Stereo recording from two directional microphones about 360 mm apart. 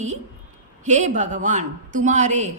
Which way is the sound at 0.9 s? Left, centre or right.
Centre.